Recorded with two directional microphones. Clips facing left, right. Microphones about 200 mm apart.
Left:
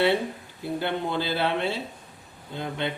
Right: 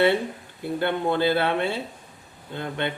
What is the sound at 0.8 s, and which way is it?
Speech, 55° right (ahead or behind).